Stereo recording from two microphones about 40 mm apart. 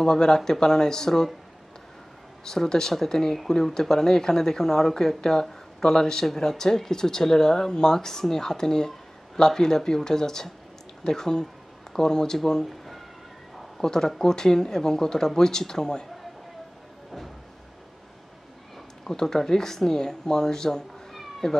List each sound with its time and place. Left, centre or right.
0.0 s speech: centre
2.4 s speech: centre
12.6 s a sound: centre
13.7 s speech: centre
19.0 s speech: centre
21.1 s cat: centre